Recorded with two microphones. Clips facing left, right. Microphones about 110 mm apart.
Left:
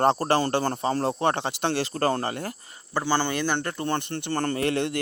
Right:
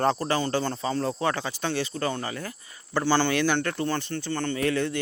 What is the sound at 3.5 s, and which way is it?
Speech, 20° left (ahead or behind).